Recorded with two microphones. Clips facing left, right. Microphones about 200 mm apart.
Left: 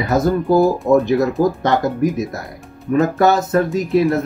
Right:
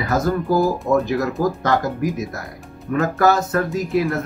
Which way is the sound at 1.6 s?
25° left (ahead or behind).